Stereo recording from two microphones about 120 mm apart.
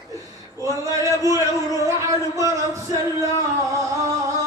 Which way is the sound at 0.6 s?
25° right (ahead or behind).